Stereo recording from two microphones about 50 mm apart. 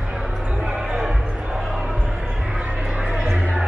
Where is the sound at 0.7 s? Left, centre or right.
Centre.